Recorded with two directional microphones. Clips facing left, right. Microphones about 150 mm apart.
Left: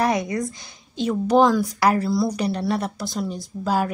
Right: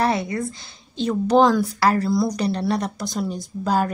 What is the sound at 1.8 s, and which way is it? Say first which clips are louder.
Speech: left 2 dB; 15° left (ahead or behind).